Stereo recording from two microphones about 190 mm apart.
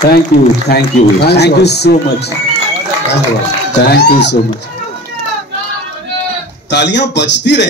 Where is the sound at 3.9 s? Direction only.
55° left (ahead or behind).